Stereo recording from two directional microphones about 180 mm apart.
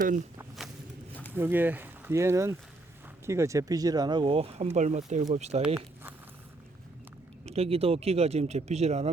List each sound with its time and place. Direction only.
1.3 s speech: 10° right (ahead or behind); by 5.6 s 40° right (ahead or behind)
5.6 s a sound: 10° right (ahead or behind)
7.4 s speech: 35° right (ahead or behind)